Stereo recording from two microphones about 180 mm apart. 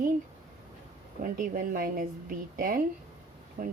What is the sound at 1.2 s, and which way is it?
A woman's voice, 50° right (ahead or behind).